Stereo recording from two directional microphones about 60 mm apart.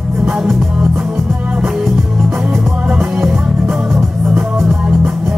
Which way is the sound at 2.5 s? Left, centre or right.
Right.